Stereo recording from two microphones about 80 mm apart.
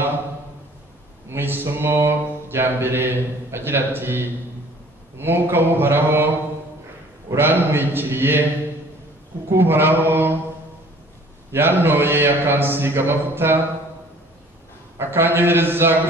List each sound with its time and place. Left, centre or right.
1.3 s mantra: right
9.5 s mantra: right
11.5 s mantra: right
15.0 s mantra: right